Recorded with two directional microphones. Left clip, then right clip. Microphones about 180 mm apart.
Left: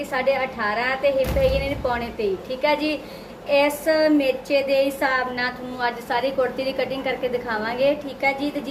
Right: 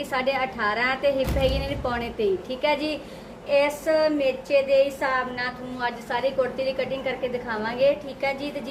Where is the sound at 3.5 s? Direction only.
5° left (ahead or behind).